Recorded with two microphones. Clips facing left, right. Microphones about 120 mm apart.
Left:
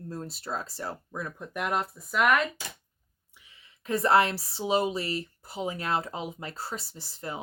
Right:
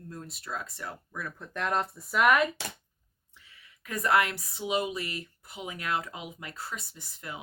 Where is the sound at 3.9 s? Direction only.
30° left (ahead or behind).